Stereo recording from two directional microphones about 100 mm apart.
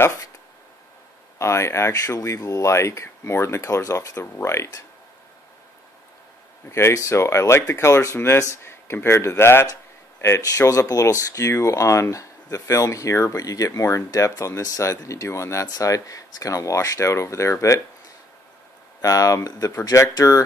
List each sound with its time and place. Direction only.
0.0 s speech: 25° left (ahead or behind)
1.4 s speech: 30° left (ahead or behind)
6.7 s speech: 30° left (ahead or behind)
18.9 s speech: 35° left (ahead or behind)